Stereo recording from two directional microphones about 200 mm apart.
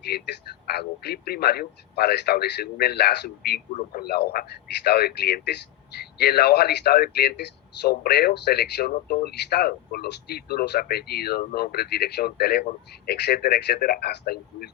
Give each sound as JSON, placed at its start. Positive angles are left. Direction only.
{"t": 0.1, "sound": "speech", "side_deg": 50}